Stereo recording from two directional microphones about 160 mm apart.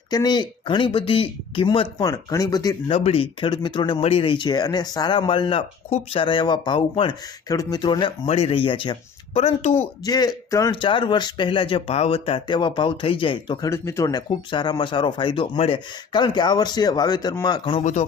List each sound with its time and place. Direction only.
0.1 s speech: 25° left (ahead or behind)
13.7 s speech: 15° left (ahead or behind)